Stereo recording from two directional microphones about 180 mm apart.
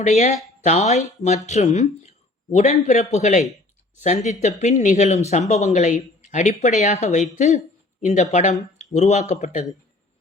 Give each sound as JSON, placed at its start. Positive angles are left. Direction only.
{"t": 0.0, "sound": "speech", "side_deg": 40}